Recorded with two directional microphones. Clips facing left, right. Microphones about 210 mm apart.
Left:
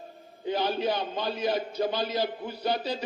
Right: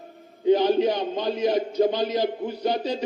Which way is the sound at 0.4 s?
15° right (ahead or behind).